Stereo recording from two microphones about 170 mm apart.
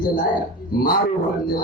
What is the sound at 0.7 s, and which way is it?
Speech, 60° left (ahead or behind).